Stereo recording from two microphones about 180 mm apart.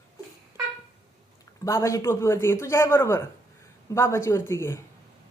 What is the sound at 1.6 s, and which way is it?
Speech, 15° left (ahead or behind).